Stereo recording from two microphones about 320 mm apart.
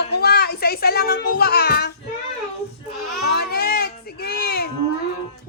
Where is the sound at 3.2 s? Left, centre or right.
Left.